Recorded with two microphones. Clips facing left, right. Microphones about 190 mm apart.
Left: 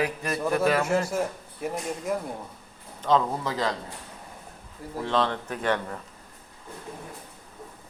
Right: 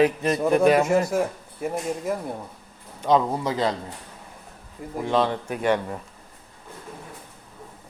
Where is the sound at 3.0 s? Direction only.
15° right (ahead or behind).